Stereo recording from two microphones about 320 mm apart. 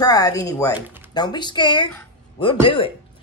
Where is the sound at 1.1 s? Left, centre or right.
Centre.